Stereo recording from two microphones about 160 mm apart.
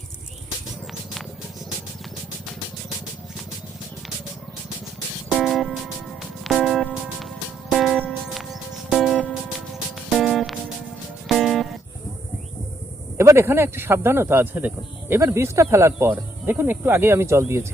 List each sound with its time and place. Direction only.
5.3 s music: centre (ahead or behind)
13.1 s speech: 15° right (ahead or behind)